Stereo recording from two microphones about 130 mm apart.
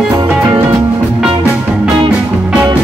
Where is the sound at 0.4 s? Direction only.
20° right (ahead or behind).